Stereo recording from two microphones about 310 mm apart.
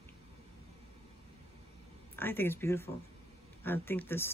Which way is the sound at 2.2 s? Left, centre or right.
Centre.